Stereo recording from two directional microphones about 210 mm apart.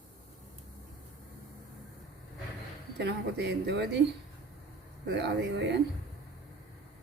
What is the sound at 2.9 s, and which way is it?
Speech, 55° right (ahead or behind).